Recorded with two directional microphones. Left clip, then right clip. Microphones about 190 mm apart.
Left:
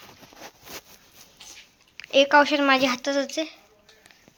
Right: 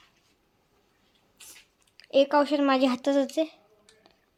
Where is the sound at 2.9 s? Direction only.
35° right (ahead or behind).